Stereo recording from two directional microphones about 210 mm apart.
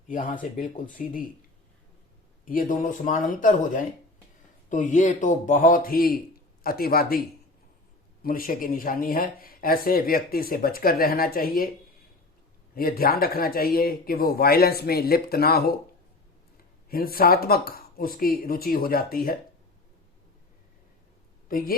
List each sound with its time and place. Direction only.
0.1 s speech: 40° left (ahead or behind)
2.4 s speech: 40° left (ahead or behind)
12.7 s speech: 45° left (ahead or behind)
16.9 s speech: 45° left (ahead or behind)
21.5 s speech: 40° left (ahead or behind)